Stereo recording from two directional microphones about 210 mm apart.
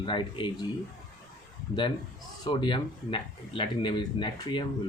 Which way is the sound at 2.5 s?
20° left (ahead or behind).